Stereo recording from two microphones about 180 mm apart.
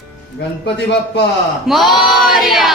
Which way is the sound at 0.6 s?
70° left (ahead or behind).